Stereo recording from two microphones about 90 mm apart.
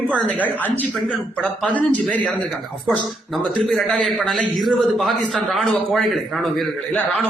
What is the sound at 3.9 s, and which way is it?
A man's voice, 5° left (ahead or behind).